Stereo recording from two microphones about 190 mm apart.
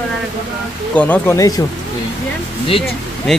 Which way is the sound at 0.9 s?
10° left (ahead or behind).